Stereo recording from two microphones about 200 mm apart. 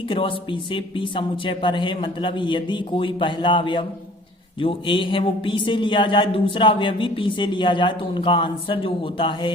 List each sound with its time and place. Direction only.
0.1 s speech: 25° left (ahead or behind)